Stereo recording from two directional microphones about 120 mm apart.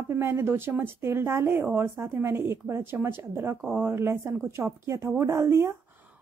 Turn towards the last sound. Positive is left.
turn(degrees=-20)  # may be behind; listen again after turning